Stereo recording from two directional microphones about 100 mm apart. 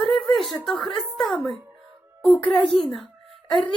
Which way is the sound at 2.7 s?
Centre (ahead or behind).